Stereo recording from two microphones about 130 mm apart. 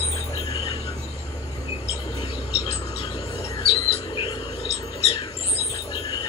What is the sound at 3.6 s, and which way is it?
Bird, 45° left (ahead or behind).